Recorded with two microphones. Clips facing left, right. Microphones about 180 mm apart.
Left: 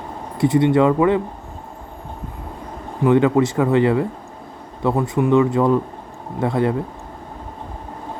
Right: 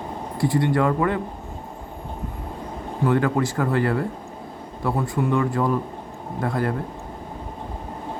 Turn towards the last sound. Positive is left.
turn(degrees=25)  # may be behind; listen again after turning